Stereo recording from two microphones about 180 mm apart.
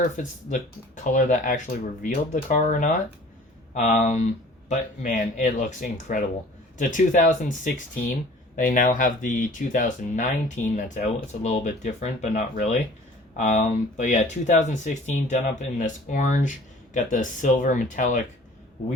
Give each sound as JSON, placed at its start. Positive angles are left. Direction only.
{"t": 0.2, "sound": "speech", "side_deg": 45}